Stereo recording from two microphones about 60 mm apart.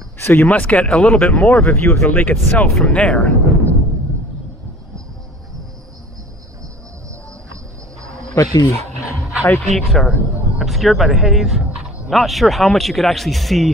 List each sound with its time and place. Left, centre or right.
0.2 s speech: left
0.5 s speech: left
1.2 s speech: left
1.9 s speech: left
2.1 s speech: left
8.0 s a sound: right
8.4 s speech: left
9.6 s speech: centre